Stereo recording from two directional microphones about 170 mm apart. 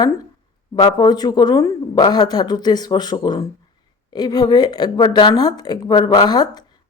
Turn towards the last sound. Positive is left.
turn(degrees=25)  # may be behind; listen again after turning